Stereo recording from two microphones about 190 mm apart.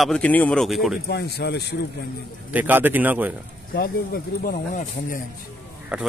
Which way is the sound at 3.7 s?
55° left (ahead or behind).